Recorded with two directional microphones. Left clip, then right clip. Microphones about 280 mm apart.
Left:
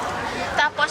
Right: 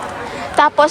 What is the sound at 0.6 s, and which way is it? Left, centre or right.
Speech, right.